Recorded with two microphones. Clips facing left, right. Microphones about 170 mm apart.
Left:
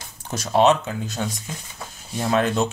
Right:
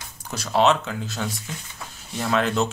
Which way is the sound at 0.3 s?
20° left (ahead or behind).